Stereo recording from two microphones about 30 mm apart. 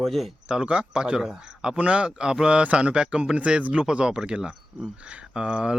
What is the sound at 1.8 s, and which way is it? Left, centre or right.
Speech, right.